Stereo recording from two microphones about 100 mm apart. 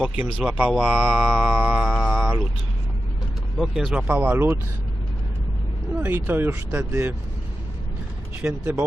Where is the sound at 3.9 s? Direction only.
15° right (ahead or behind).